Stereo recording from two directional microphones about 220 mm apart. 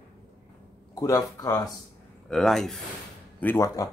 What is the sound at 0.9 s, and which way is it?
Speech, 15° left (ahead or behind).